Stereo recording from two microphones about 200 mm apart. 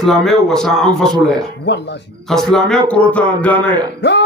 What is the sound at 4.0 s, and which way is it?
Speech, 60° left (ahead or behind).